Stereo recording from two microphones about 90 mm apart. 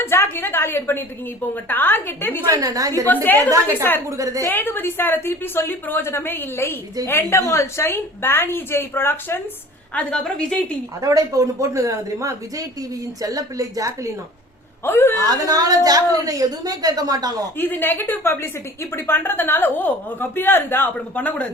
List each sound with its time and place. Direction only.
0.0 s a woman's voice: 25° left (ahead or behind)
2.5 s speech: 40° right (ahead or behind)
3.1 s a woman's voice: 20° left (ahead or behind)
9.9 s a woman's voice: 10° left (ahead or behind)
11.0 s speech: 40° right (ahead or behind)
14.8 s a woman's voice: 25° left (ahead or behind)
15.3 s a woman's voice: 45° right (ahead or behind)
17.6 s a woman's voice: 20° left (ahead or behind)